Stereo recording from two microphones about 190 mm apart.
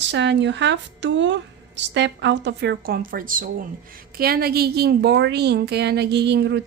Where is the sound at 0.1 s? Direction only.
70° right (ahead or behind).